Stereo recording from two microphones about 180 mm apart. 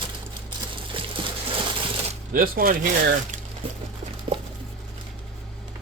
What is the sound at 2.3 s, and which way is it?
Speech, 55° right (ahead or behind).